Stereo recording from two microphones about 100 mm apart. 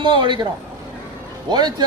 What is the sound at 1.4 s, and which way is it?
Speech, 45° right (ahead or behind).